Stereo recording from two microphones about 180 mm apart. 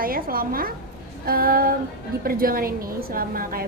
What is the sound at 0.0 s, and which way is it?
A woman's voice, 55° right (ahead or behind).